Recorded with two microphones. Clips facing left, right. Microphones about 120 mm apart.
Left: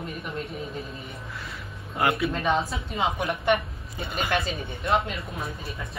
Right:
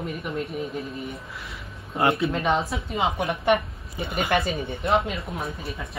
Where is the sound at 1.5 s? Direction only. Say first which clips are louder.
Left 1 dB; 25° right (ahead or behind).